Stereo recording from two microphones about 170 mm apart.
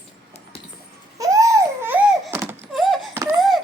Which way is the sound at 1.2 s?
20° right (ahead or behind).